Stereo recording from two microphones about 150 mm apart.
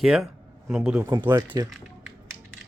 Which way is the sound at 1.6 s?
25° right (ahead or behind).